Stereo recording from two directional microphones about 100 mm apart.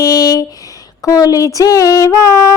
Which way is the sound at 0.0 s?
35° left (ahead or behind).